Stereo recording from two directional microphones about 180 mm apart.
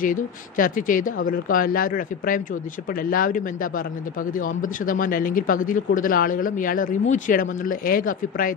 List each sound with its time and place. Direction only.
0.0 s speech: 50° left (ahead or behind)